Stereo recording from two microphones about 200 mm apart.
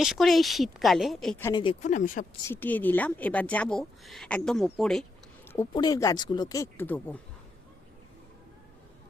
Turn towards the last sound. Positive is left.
turn(degrees=10)  # may be behind; listen again after turning